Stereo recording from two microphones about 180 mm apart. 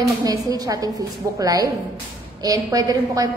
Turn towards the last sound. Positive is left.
turn(degrees=-20)  # may be behind; listen again after turning